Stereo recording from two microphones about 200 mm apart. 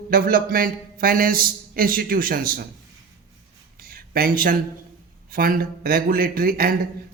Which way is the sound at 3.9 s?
45° right (ahead or behind).